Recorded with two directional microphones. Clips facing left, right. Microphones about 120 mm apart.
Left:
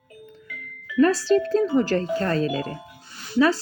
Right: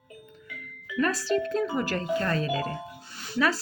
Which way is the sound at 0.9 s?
30° left (ahead or behind).